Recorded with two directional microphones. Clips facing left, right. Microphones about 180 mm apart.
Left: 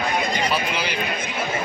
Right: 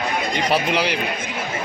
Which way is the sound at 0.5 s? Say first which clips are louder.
Right 5 dB; 75° right (ahead or behind).